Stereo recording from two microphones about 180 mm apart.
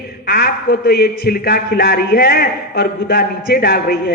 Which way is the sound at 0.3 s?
60° left (ahead or behind).